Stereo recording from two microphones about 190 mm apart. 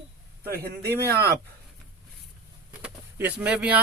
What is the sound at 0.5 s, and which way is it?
Speech, 55° right (ahead or behind).